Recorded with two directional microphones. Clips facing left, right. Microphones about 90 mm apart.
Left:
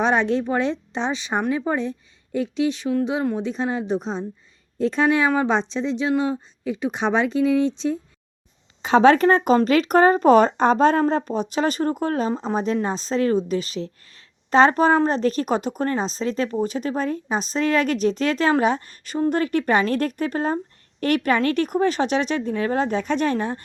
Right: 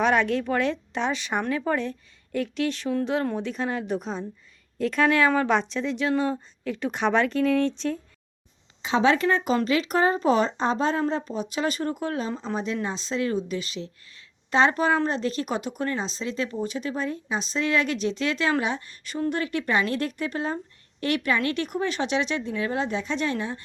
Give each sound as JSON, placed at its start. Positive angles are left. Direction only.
{"t": 0.0, "sound": "speech", "side_deg": 25}
{"t": 8.8, "sound": "speech", "side_deg": 50}